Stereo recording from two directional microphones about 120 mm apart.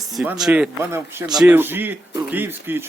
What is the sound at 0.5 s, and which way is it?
Speech, 20° right (ahead or behind).